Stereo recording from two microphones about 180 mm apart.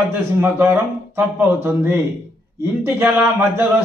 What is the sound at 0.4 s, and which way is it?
A man's voice, 10° right (ahead or behind).